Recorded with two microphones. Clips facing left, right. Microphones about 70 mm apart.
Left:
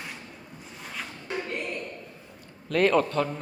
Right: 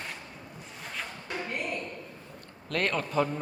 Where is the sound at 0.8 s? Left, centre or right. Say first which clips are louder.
Even; centre.